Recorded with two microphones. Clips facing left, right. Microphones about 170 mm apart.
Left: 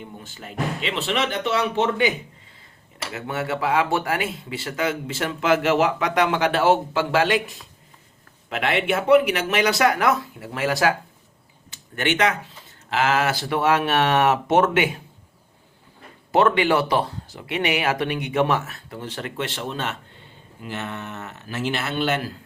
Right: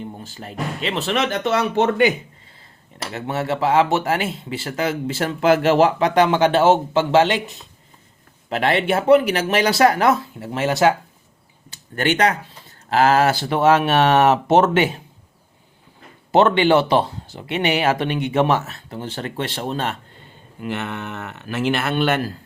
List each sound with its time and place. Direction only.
0.2 s speech: 35° right (ahead or behind)
3.0 s speech: 35° right (ahead or behind)
11.7 s speech: 35° right (ahead or behind)
16.3 s speech: 30° right (ahead or behind)
20.6 s speech: 65° right (ahead or behind)